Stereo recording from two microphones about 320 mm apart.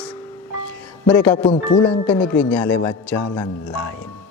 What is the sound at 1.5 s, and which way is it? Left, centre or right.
Speech, centre.